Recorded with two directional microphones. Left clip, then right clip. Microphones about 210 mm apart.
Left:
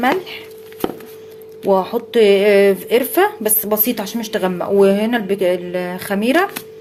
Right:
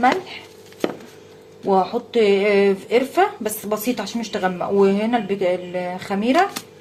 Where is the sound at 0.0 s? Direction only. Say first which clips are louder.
Left 1 dB; 35° left (ahead or behind).